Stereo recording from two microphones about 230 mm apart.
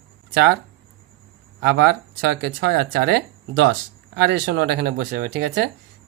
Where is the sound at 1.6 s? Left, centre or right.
Right.